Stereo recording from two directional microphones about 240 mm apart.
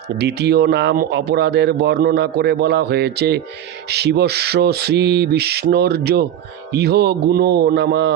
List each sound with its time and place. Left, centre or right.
0.2 s speech: right